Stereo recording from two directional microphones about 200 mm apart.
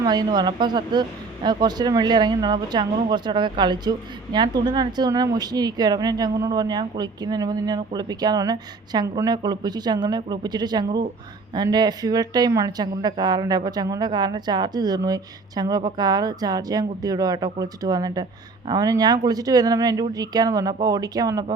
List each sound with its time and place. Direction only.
0.0 s speech: 20° right (ahead or behind)